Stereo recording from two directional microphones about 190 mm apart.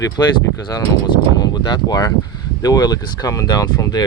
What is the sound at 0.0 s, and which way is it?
Speech, 20° left (ahead or behind).